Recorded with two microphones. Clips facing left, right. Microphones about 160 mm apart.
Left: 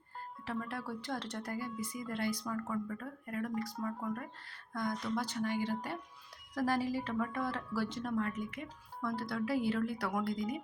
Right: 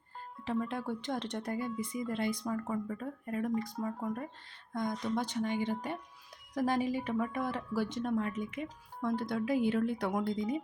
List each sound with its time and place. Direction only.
0.4 s speech: 20° right (ahead or behind)